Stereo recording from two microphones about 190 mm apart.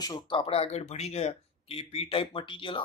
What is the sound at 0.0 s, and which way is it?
Speech, 25° left (ahead or behind).